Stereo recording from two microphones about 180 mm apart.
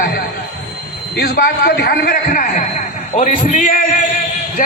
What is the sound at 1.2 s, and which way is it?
A man's voice, 55° left (ahead or behind).